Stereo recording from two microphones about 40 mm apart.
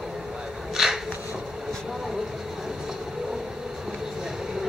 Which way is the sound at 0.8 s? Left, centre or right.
Centre.